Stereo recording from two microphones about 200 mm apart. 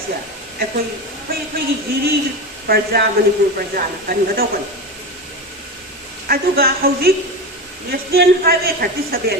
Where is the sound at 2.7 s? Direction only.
45° right (ahead or behind).